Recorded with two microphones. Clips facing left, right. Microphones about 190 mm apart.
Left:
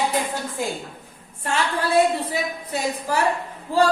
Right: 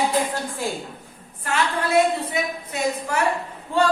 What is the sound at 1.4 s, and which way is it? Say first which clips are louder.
A woman's voice: even; 30° left (ahead or behind).